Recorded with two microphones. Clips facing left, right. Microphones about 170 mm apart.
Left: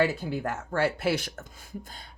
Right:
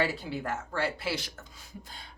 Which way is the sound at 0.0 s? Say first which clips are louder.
Left 4 dB; 50° left (ahead or behind).